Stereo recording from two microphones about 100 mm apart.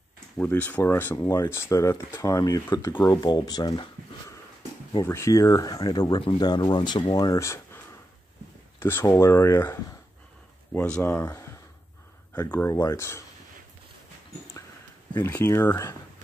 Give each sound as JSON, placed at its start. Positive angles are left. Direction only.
{"t": 0.4, "sound": "speech", "side_deg": 15}
{"t": 5.0, "sound": "speech", "side_deg": 25}
{"t": 7.3, "sound": "speech", "side_deg": 30}
{"t": 10.7, "sound": "speech", "side_deg": 15}
{"t": 11.2, "sound": "speech", "side_deg": 35}
{"t": 12.4, "sound": "speech", "side_deg": 20}
{"t": 15.2, "sound": "speech", "side_deg": 25}